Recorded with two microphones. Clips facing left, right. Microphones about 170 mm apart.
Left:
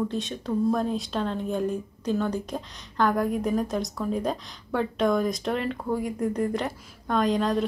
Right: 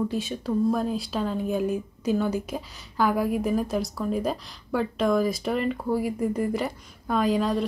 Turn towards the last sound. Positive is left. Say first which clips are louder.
# even
turn(degrees=0)  # may be behind; listen again after turning